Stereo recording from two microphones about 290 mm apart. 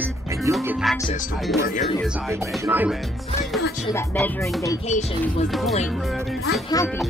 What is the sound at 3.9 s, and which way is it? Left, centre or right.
Speech, centre.